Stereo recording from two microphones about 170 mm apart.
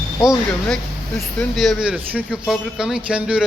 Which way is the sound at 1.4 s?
Centre (ahead or behind).